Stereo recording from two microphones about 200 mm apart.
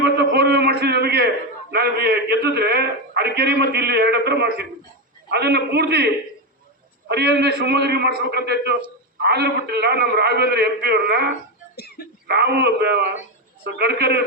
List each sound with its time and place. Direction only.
0.0 s a sound: 55° right (ahead or behind)
5.3 s a man's voice: 55° right (ahead or behind)
7.1 s a man's voice: 55° right (ahead or behind)
12.0 s speech: 50° left (ahead or behind)
12.3 s a man's voice: 55° right (ahead or behind)